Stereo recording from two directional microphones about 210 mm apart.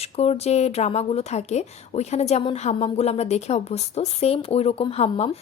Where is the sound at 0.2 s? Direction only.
30° left (ahead or behind).